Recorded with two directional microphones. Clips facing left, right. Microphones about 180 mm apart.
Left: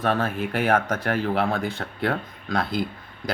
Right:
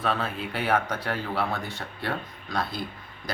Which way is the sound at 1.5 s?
90° left.